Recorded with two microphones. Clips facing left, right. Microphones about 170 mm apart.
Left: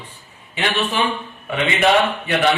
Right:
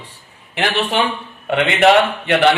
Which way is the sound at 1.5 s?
70° right (ahead or behind).